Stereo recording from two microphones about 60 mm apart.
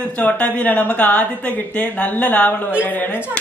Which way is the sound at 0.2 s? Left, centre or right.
Left.